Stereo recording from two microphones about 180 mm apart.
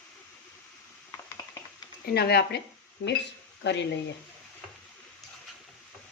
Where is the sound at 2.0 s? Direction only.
60° left (ahead or behind).